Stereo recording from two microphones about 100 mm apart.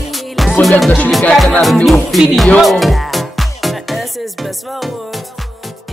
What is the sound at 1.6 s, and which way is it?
Speech, centre (ahead or behind).